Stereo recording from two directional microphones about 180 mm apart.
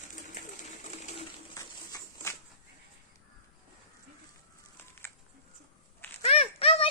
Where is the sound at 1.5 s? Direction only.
20° left (ahead or behind).